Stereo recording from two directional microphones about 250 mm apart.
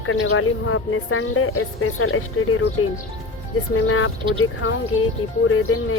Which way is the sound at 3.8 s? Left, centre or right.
Left.